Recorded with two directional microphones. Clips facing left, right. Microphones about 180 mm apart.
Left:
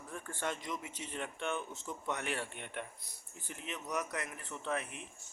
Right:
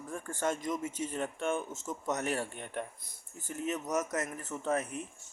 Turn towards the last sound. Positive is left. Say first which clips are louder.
# right 6 dB
turn(degrees=-40)  # may be behind; listen again after turning